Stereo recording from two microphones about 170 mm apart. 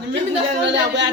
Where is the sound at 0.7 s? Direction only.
90° right.